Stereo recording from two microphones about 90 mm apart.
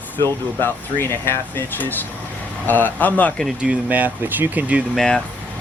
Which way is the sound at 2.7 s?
20° left (ahead or behind).